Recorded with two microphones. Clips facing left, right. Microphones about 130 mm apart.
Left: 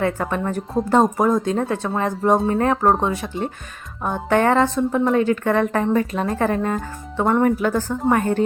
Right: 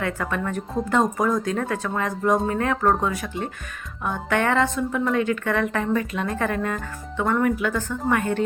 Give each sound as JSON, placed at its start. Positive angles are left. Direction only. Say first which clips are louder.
{"t": 0.0, "sound": "a woman's voice", "louder": "left 4 dB", "side_deg": 30}